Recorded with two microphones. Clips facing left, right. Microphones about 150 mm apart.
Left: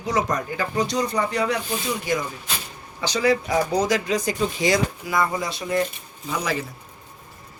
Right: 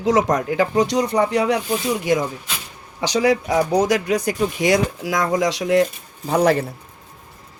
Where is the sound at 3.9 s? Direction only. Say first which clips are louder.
Right 3 dB; 65° right (ahead or behind); by 5.9 s 85° right.